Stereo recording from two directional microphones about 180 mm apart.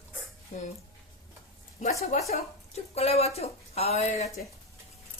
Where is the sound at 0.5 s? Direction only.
45° left (ahead or behind).